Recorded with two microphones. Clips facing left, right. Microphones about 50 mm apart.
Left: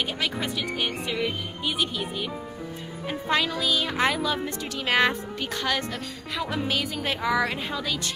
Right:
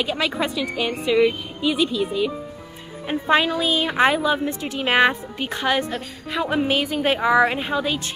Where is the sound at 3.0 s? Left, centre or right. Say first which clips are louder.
Right 7 dB; right.